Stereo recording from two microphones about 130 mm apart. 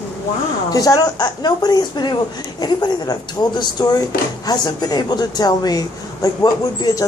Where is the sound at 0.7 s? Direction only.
30° left (ahead or behind).